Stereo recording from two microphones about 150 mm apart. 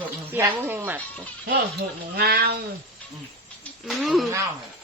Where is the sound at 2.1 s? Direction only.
90° right.